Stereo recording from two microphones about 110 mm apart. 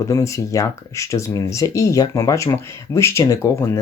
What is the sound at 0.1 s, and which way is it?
Speech, 30° left (ahead or behind).